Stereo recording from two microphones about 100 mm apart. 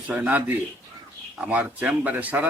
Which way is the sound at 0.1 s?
15° right (ahead or behind).